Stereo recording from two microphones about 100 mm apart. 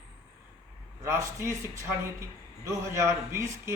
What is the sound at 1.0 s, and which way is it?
Speech, 30° right (ahead or behind).